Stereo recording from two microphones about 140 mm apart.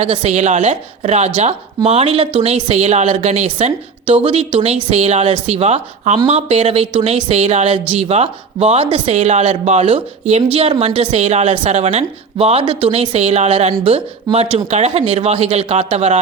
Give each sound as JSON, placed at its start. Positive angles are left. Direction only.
{"t": 0.0, "sound": "a woman's voice", "side_deg": -50}